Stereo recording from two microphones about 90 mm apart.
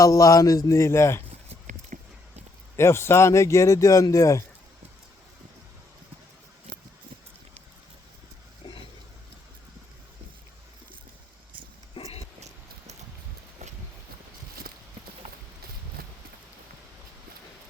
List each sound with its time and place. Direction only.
0.0 s speech: 40° left (ahead or behind)
2.7 s speech: 30° left (ahead or behind)
12.0 s a sound: 90° left